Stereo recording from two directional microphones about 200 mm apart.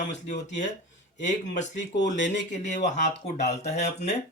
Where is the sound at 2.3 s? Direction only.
35° left (ahead or behind).